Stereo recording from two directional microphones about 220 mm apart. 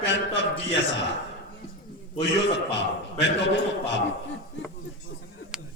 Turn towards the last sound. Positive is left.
turn(degrees=55)  # may be behind; listen again after turning